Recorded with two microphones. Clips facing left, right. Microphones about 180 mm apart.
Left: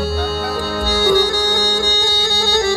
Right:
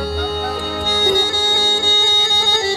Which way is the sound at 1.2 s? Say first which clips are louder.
Left 4 dB; 40° left (ahead or behind).